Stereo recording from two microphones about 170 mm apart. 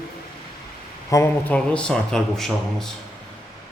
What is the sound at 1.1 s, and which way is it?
Speech, 15° left (ahead or behind).